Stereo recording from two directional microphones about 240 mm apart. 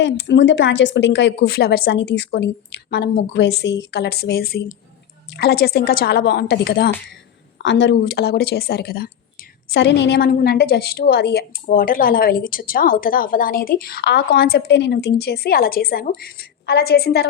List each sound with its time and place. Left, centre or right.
0.0 s speech: left